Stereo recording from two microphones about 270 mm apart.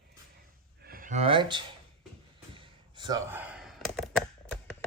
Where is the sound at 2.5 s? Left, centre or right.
Centre.